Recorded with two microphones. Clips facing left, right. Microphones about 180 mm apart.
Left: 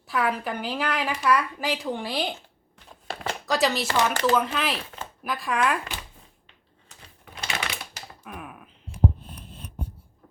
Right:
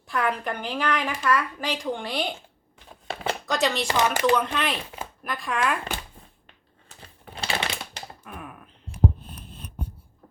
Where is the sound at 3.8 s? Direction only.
15° right (ahead or behind).